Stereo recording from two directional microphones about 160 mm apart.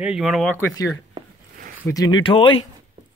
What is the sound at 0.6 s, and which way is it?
Speech, 20° left (ahead or behind).